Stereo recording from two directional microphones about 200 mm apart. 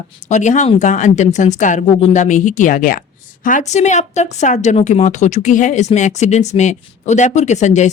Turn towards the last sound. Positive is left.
turn(degrees=35)  # may be behind; listen again after turning